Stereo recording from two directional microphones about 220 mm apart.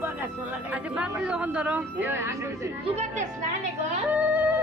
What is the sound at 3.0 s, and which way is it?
Speech, 35° right (ahead or behind).